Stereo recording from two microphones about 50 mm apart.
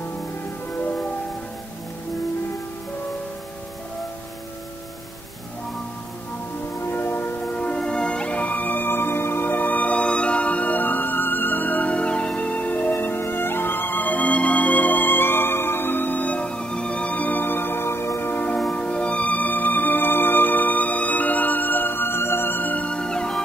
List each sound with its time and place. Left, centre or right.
0.7 s music: left
6.8 s music: left
7.5 s music: left
13.1 s music: left
18.3 s music: left
22.8 s music: centre